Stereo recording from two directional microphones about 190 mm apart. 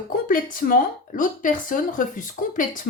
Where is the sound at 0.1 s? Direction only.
45° left (ahead or behind).